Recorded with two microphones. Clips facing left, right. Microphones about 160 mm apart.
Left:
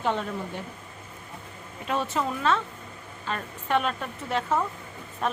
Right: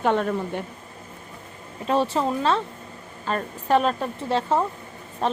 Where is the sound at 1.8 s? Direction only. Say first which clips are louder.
Right 6 dB; 30° right (ahead or behind).